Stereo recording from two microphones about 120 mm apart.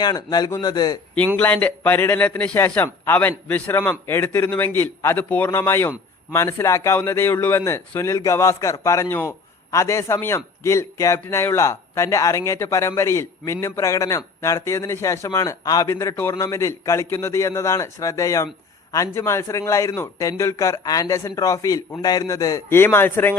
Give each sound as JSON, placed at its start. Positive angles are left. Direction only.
{"t": 0.0, "sound": "speech", "side_deg": 35}
{"t": 1.4, "sound": "a man's voice", "side_deg": 15}